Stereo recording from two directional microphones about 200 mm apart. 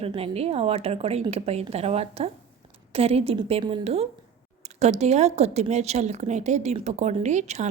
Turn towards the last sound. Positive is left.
turn(degrees=-35)  # may be behind; listen again after turning